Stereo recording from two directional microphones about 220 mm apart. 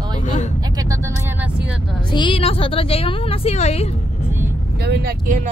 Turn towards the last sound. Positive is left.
turn(degrees=-35)  # may be behind; listen again after turning